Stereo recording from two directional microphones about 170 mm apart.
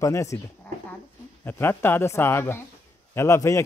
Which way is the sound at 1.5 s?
15° left (ahead or behind).